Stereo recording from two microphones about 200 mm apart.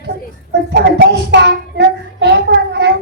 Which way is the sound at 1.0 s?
55° right (ahead or behind).